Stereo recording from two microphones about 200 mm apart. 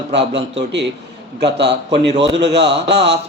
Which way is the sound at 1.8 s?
30° right (ahead or behind).